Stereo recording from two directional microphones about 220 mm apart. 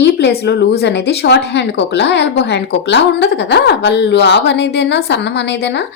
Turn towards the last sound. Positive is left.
turn(degrees=50)  # may be behind; listen again after turning